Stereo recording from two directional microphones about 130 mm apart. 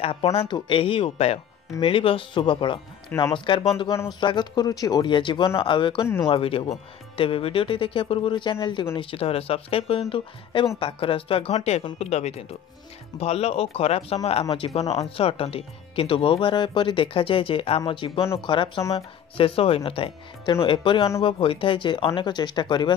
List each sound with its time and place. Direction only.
0.0 s speech: 50° left (ahead or behind)